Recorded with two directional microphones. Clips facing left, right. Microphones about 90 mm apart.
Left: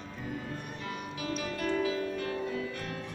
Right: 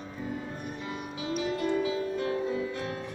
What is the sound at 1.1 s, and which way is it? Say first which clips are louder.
Music: right 5 dB; 25° right (ahead or behind).